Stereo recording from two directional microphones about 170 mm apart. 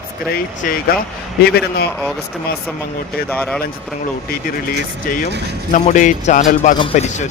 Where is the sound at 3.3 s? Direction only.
5° left (ahead or behind).